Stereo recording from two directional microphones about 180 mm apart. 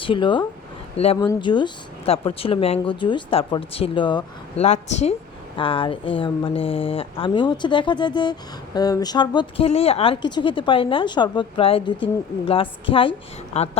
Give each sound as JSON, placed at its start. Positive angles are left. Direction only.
{"t": 0.0, "sound": "a woman's voice", "side_deg": 25}
{"t": 4.6, "sound": "a woman's voice", "side_deg": 40}